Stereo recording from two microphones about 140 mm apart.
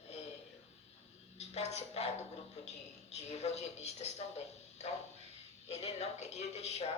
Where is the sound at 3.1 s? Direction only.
50° left (ahead or behind).